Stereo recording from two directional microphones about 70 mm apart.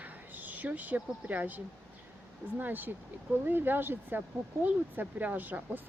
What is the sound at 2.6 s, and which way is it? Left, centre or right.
Speech, right.